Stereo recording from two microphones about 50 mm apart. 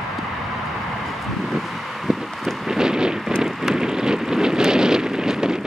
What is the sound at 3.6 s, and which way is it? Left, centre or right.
Wind noise, centre.